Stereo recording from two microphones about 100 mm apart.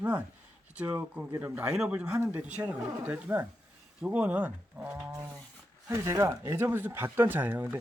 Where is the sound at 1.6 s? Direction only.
10° right (ahead or behind).